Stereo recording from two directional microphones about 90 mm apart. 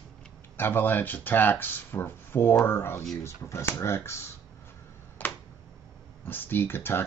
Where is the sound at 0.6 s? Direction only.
20° left (ahead or behind).